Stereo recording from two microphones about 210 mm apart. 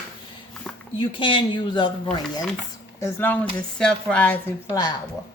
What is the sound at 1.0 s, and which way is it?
A woman's voice, 25° left (ahead or behind).